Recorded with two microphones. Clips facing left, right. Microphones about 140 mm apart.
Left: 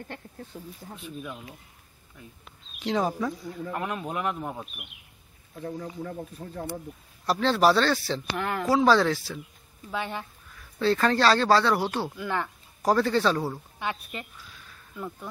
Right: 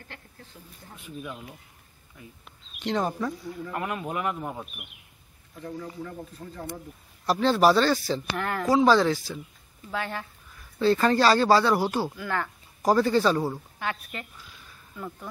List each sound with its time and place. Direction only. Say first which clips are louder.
0.5 s speech: left 10 dB; 40° left (ahead or behind)
2.4 s speech: even; centre (ahead or behind)
3.7 s speech: right 1 dB; 10° right (ahead or behind); by 6.8 s 10° left (ahead or behind)
7.2 s speech: right 1 dB; centre (ahead or behind)
8.4 s speech: even; 10° left (ahead or behind)
8.6 s speech: right 1 dB; centre (ahead or behind)
9.9 s speech: even; 15° left (ahead or behind)
10.5 s speech: right 2 dB; 5° right (ahead or behind)
12.2 s speech: even; 20° left (ahead or behind)
12.8 s speech: right 1 dB; 5° right (ahead or behind)
13.7 s speech: even; 20° left (ahead or behind)
14.7 s a sound: left 1 dB; centre (ahead or behind)